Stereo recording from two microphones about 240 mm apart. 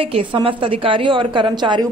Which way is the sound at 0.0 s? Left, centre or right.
Right.